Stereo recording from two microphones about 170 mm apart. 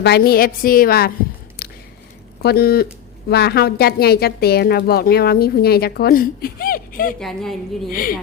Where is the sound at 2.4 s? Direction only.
65° left (ahead or behind).